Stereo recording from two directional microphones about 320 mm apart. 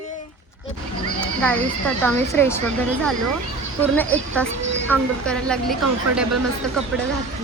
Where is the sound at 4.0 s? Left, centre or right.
Centre.